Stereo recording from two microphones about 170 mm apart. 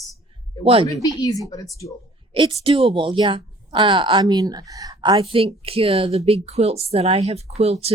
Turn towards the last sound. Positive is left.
turn(degrees=-35)  # may be behind; listen again after turning